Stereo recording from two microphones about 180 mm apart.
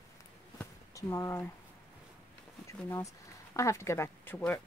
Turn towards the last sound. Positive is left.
turn(degrees=10)  # may be behind; listen again after turning